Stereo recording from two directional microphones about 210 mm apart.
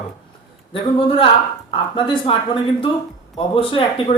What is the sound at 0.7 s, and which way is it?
Speech, 25° left (ahead or behind).